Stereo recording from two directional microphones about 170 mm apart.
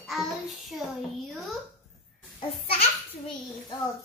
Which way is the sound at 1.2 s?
Centre (ahead or behind).